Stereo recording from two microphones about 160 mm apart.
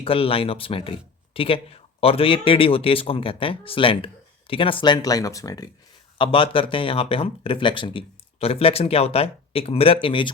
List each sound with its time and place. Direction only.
0.0 s speech: 35° left (ahead or behind)